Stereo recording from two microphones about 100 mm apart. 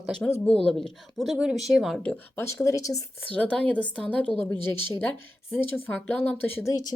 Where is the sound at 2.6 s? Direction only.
35° left (ahead or behind).